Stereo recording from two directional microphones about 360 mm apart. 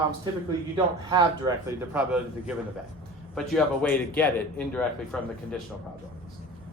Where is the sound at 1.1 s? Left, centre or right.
Centre.